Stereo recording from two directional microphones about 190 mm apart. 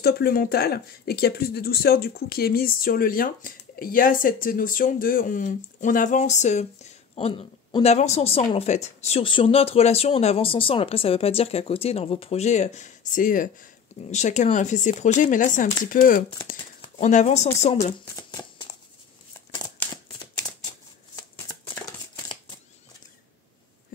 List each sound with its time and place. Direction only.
0.0 s speech: 55° left (ahead or behind); by 17.5 s 35° left (ahead or behind)
18.0 s shuffling cards: 15° left (ahead or behind)